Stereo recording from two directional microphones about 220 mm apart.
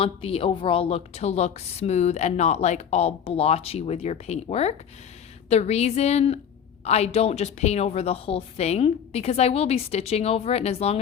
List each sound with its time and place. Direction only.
0.0 s a woman's voice: 25° left (ahead or behind)